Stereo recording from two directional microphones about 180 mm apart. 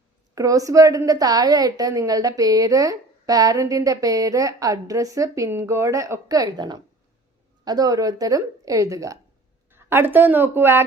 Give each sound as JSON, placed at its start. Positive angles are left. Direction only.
{"t": 0.3, "sound": "a woman's voice", "side_deg": -20}